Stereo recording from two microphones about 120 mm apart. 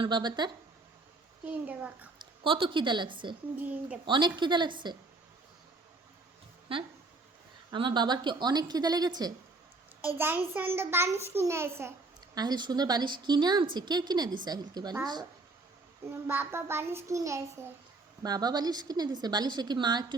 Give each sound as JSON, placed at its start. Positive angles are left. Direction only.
{"t": 0.0, "sound": "a woman's voice", "side_deg": -35}
{"t": 1.5, "sound": "a woman's voice", "side_deg": -10}
{"t": 2.1, "sound": "a woman's voice", "side_deg": -45}
{"t": 3.6, "sound": "a woman's voice", "side_deg": -10}
{"t": 4.0, "sound": "a woman's voice", "side_deg": -40}
{"t": 6.7, "sound": "a woman's voice", "side_deg": -50}
{"t": 10.2, "sound": "a woman's voice", "side_deg": -15}
{"t": 12.3, "sound": "a woman's voice", "side_deg": -35}
{"t": 16.2, "sound": "a child's voice", "side_deg": -20}